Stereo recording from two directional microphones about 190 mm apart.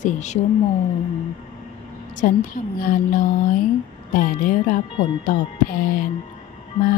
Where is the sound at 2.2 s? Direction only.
45° left (ahead or behind).